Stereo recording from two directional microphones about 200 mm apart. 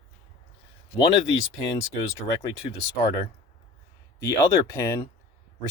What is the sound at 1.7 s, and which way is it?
Speech, 15° left (ahead or behind).